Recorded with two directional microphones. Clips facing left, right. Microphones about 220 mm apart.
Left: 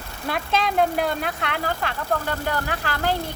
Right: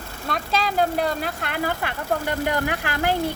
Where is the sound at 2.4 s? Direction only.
15° right (ahead or behind).